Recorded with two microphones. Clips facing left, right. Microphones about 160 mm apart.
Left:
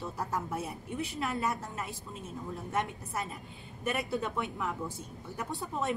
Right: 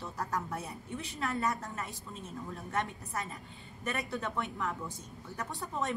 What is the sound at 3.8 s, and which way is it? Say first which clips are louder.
A woman's voice: left 3 dB; 10° left (ahead or behind).